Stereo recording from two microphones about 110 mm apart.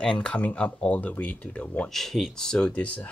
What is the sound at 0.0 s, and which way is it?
Speech, 10° left (ahead or behind).